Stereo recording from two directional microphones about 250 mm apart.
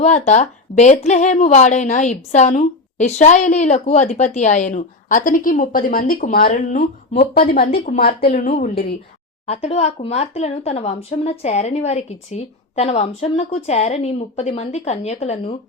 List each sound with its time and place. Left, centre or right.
0.0 s speech: left